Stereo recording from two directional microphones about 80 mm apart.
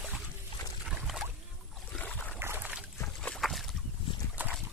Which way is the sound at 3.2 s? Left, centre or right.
Centre.